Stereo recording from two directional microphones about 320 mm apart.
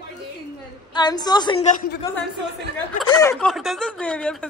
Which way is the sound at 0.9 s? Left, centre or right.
Centre.